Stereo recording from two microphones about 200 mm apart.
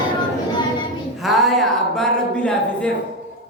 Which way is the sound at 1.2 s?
Centre (ahead or behind).